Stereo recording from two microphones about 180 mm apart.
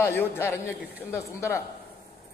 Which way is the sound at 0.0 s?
15° left (ahead or behind).